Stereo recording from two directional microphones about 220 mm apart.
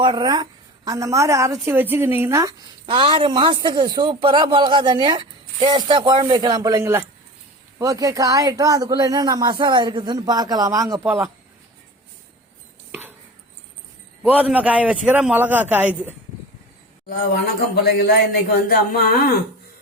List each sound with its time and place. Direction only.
0.0 s speech: 20° right (ahead or behind)
12.9 s a sound: 10° right (ahead or behind)
14.2 s a man's voice: 5° right (ahead or behind)
17.1 s speech: 45° left (ahead or behind)